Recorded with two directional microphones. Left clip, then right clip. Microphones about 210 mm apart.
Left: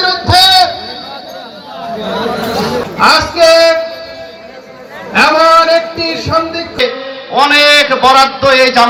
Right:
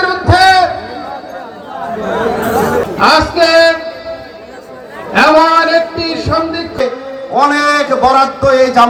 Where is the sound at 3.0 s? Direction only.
10° left (ahead or behind).